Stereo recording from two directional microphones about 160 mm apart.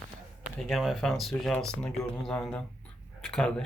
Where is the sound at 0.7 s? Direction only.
Centre (ahead or behind).